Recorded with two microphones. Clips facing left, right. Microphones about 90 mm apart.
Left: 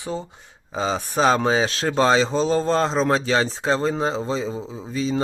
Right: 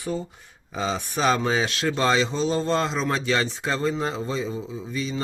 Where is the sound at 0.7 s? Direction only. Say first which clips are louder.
Left 3 dB; 35° left (ahead or behind).